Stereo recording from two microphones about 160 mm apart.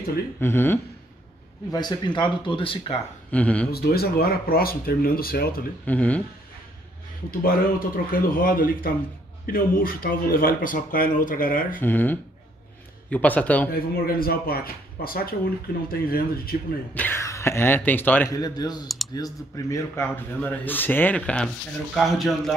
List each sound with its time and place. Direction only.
0.4 s speech: 15° left (ahead or behind)
1.7 s speech: 25° left (ahead or behind)
3.3 s speech: 10° left (ahead or behind)
3.7 s speech: 75° left (ahead or behind)
5.9 s speech: 10° left (ahead or behind)
7.2 s speech: 65° left (ahead or behind)
11.8 s speech: 10° left (ahead or behind)
13.7 s speech: 70° left (ahead or behind)
16.9 s speech: 10° left (ahead or behind)
18.3 s a man's voice: 25° left (ahead or behind); by 22.3 s centre (ahead or behind)